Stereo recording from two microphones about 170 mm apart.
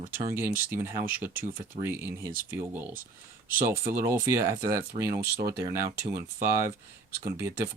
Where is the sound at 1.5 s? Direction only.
55° right (ahead or behind).